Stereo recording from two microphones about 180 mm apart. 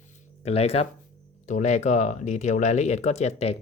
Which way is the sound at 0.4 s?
35° left (ahead or behind).